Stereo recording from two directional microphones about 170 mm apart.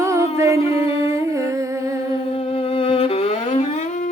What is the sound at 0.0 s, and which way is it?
Music, 15° right (ahead or behind).